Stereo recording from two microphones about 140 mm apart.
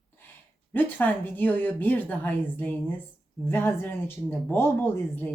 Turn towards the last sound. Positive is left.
turn(degrees=15)  # may be behind; listen again after turning